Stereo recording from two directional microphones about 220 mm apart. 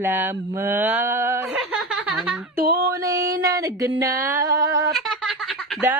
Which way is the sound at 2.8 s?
15° right (ahead or behind).